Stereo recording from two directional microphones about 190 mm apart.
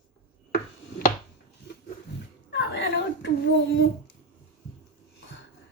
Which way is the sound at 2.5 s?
65° left (ahead or behind).